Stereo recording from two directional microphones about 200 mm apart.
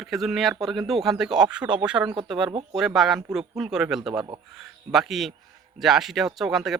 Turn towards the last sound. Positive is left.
turn(degrees=0)  # may be behind; listen again after turning